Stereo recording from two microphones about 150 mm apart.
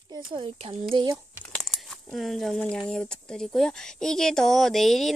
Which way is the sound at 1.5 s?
Centre (ahead or behind).